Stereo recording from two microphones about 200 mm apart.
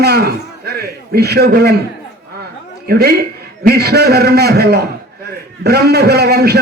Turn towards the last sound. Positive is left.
turn(degrees=-55)  # may be behind; listen again after turning